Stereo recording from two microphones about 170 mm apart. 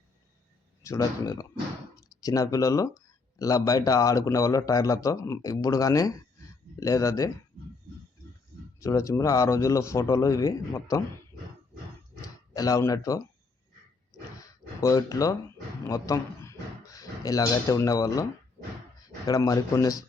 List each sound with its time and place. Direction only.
0.8 s speech: 20° left (ahead or behind)
8.8 s speech: 20° left (ahead or behind)
12.5 s speech: 20° left (ahead or behind)
14.3 s a sound: 20° left (ahead or behind)
15.9 s speech: 20° left (ahead or behind)